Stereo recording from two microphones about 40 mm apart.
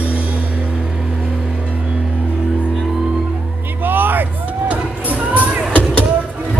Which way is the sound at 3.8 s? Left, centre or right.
Right.